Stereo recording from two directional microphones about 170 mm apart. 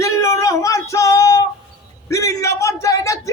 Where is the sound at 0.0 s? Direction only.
15° left (ahead or behind).